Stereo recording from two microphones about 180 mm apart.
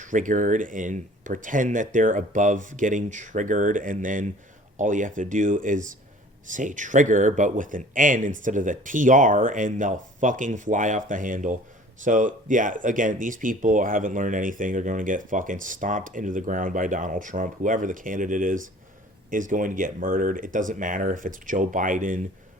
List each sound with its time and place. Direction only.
0.0 s speech: 45° right (ahead or behind)